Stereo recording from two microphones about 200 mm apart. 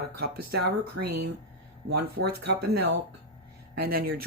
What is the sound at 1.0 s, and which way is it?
Speech, 90° right.